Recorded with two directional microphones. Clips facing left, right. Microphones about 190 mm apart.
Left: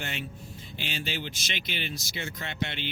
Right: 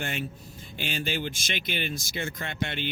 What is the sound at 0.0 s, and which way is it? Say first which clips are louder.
Speech: right 4 dB; 50° right (ahead or behind).